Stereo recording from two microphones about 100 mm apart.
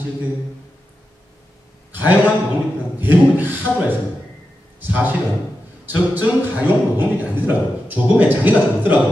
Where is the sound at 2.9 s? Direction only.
20° right (ahead or behind).